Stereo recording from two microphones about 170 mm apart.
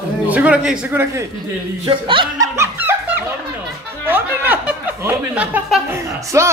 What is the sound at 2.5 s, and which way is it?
Laughter, 15° right (ahead or behind).